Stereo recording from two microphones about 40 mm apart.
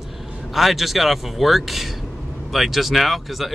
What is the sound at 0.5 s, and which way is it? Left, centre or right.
Speech, centre.